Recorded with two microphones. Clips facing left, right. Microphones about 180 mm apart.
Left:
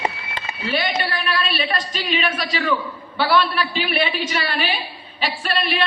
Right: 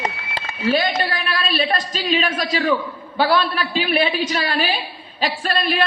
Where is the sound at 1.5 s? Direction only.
40° right (ahead or behind).